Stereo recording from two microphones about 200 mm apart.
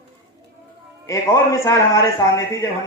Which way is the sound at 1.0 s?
15° left (ahead or behind).